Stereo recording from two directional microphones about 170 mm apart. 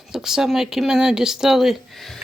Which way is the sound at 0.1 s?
5° right (ahead or behind).